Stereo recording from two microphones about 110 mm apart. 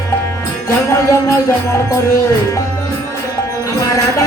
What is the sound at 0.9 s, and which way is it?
Music, 25° left (ahead or behind).